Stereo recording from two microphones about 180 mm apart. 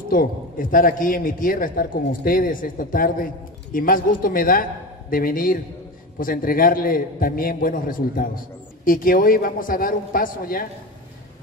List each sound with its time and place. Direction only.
0.1 s a man's voice: 50° left (ahead or behind)